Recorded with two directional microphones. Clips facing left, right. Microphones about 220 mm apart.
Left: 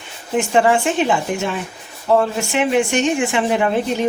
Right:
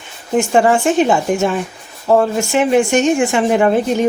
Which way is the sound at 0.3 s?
45° right (ahead or behind).